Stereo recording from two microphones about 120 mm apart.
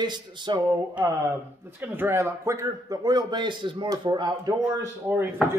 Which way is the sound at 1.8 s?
15° right (ahead or behind).